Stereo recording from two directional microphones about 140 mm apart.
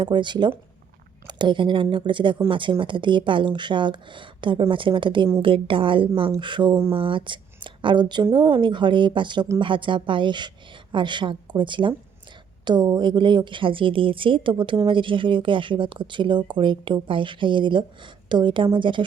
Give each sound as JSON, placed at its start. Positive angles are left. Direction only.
{"t": 0.0, "sound": "a woman's voice", "side_deg": -35}